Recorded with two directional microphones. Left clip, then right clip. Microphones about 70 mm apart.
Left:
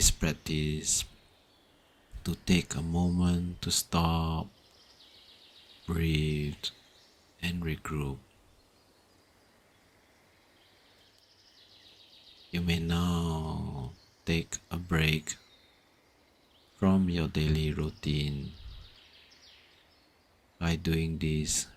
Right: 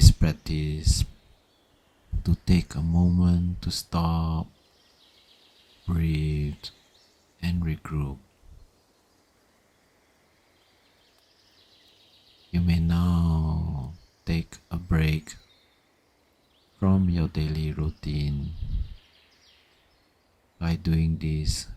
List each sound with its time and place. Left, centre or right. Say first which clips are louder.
0.0 s speech: right 2 dB; centre
2.3 s speech: right 1 dB; right
5.9 s speech: even; centre
12.5 s speech: right 2 dB; right
16.8 s speech: right 2 dB; right
20.6 s speech: right 1 dB; right